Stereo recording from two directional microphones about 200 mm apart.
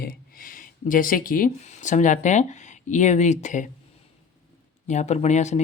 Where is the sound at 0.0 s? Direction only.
45° left (ahead or behind).